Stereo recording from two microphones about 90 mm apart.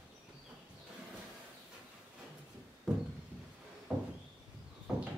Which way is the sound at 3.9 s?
15° right (ahead or behind).